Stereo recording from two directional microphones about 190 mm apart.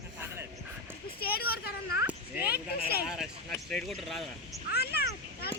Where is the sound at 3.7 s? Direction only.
Centre (ahead or behind).